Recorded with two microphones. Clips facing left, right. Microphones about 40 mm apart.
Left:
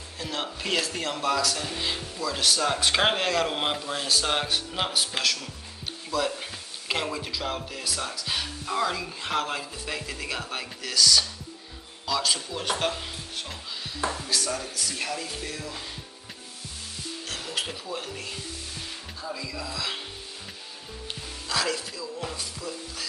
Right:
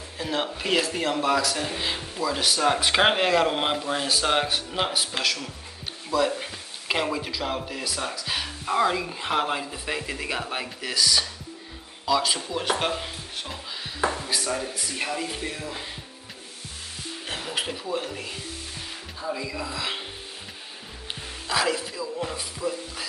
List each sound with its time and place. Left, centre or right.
0.2 s speech: centre
8.6 s a woman's voice: right
17.3 s music: right
17.9 s speech: centre
19.2 s a woman's voice: right
21.1 s speech: centre